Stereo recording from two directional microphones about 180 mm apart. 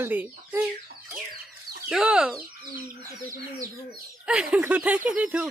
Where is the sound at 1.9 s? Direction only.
5° right (ahead or behind).